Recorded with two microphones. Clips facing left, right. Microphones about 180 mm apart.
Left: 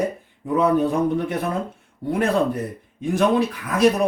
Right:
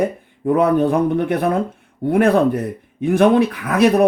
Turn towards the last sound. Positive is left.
turn(degrees=-60)  # may be behind; listen again after turning